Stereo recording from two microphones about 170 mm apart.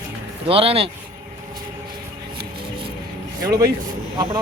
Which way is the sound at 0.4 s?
35° right (ahead or behind).